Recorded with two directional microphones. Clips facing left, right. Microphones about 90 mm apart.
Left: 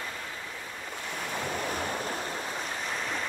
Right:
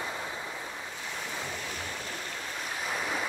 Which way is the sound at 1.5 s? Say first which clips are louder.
Left 6 dB; 50° left (ahead or behind).